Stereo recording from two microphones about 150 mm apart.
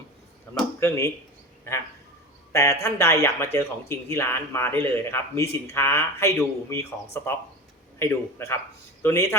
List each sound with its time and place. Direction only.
0.8 s speech: 15° left (ahead or behind)
2.5 s a man's voice: 20° left (ahead or behind)